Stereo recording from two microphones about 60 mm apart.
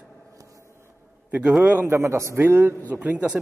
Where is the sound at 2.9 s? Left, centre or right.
Right.